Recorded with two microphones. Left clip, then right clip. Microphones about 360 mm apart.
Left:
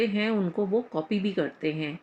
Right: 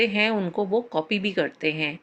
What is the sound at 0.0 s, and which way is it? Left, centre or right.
Speech, right.